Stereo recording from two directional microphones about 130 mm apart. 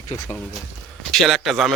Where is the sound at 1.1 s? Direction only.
Centre (ahead or behind).